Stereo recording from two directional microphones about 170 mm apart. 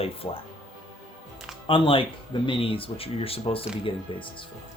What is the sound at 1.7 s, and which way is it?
Speech, 30° left (ahead or behind).